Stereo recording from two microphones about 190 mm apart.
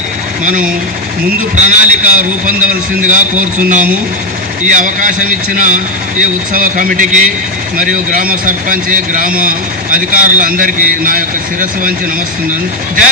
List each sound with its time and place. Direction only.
0.4 s a man's voice: 40° right (ahead or behind)